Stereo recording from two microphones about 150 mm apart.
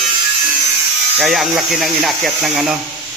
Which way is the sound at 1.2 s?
Centre (ahead or behind).